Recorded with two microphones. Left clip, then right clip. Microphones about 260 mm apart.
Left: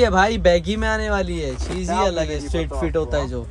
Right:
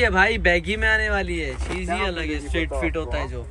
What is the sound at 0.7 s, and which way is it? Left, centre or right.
Speech, centre.